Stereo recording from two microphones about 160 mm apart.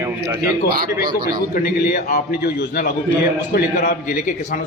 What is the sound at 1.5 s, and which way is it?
A man's voice, 60° left (ahead or behind).